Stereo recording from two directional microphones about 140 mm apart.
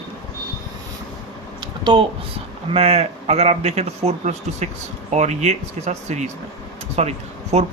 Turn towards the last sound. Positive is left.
turn(degrees=-50)  # may be behind; listen again after turning